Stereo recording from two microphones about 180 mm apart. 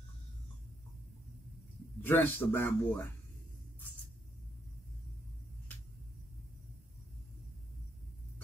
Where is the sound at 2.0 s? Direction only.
10° left (ahead or behind).